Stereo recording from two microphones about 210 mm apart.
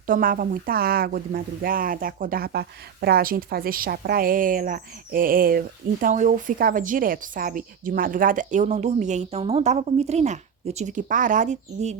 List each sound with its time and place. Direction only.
0.0 s speech: 40° right (ahead or behind)